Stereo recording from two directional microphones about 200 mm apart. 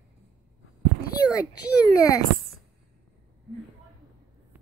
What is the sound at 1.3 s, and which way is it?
Speech, 15° left (ahead or behind).